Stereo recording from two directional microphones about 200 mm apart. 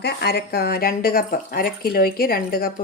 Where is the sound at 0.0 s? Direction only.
55° left (ahead or behind).